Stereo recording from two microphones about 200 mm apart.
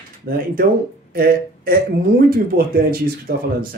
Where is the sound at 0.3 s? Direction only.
45° right (ahead or behind).